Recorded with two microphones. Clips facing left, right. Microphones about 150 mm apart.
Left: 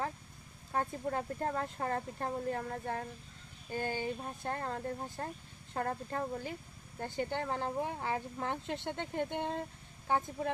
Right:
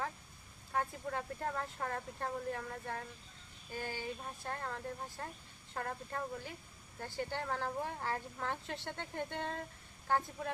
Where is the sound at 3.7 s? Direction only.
50° left (ahead or behind).